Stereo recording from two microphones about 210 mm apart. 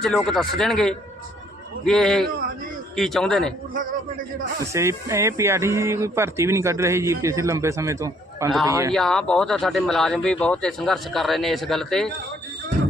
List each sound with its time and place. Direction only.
0.0 s speech: centre (ahead or behind)
4.6 s speech: 15° right (ahead or behind)
8.9 s speech: centre (ahead or behind)